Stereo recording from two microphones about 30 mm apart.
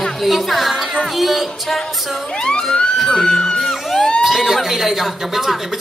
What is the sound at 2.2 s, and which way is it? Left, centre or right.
Emergency vehicle, left.